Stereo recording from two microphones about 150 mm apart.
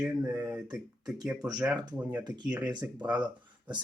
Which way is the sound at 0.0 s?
5° right (ahead or behind).